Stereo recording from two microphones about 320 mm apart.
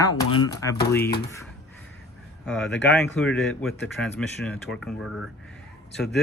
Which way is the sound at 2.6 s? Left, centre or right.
Left.